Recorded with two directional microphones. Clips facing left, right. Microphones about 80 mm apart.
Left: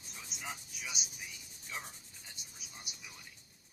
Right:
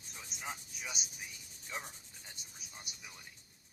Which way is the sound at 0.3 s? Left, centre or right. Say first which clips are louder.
Right 1 dB; right.